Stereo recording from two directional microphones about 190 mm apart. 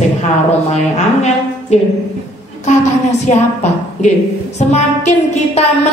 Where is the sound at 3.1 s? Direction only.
35° left (ahead or behind).